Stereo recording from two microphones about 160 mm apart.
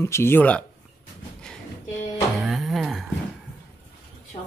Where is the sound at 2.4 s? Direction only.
Centre (ahead or behind).